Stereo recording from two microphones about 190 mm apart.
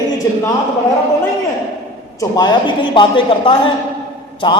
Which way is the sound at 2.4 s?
25° left (ahead or behind).